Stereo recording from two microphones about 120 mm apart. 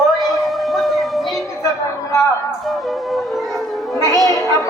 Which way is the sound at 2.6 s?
Centre (ahead or behind).